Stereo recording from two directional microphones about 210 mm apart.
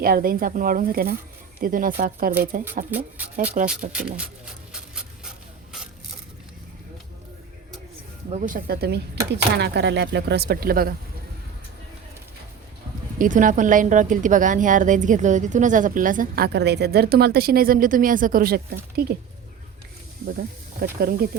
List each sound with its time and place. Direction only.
0.0 s a woman's voice: 45° right (ahead or behind)
8.3 s speech: 35° right (ahead or behind)
13.1 s a woman's voice: 40° right (ahead or behind)
21.0 s speech: 45° right (ahead or behind)